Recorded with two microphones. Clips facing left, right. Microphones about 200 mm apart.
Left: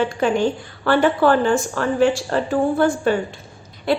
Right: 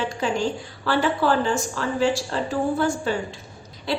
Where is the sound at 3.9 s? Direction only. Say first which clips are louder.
Left 6 dB; 55° left (ahead or behind).